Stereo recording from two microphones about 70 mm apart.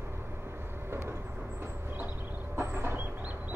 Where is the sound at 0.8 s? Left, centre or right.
Right.